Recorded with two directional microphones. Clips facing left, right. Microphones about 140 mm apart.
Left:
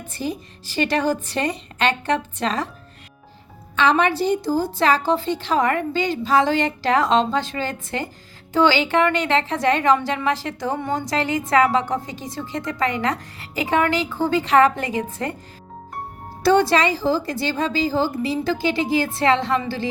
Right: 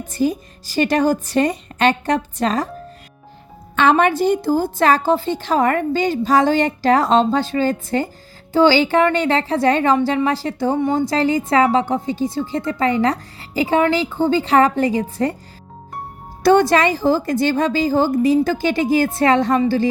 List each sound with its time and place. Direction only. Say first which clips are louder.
0.1 s a woman's voice: right 8 dB; 45° right (ahead or behind)
3.8 s a woman's voice: right 4 dB; 50° right (ahead or behind); by 15.4 s 35° right (ahead or behind)
16.4 s a woman's voice: right 3 dB; 50° right (ahead or behind)